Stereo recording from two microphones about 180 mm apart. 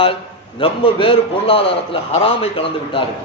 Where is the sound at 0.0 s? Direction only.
30° left (ahead or behind).